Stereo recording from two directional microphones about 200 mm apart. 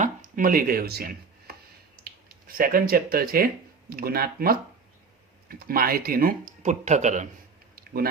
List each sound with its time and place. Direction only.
0.0 s speech: 45° right (ahead or behind)